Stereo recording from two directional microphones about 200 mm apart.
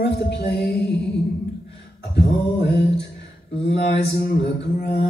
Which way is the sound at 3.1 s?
60° left (ahead or behind).